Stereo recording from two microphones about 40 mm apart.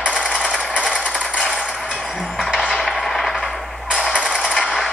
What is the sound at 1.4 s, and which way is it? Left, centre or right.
Mechanisms, left.